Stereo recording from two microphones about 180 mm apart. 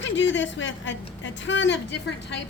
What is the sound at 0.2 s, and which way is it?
A woman's voice, 90° left.